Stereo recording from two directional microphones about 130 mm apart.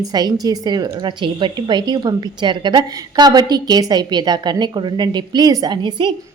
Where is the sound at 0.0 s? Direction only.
30° right (ahead or behind).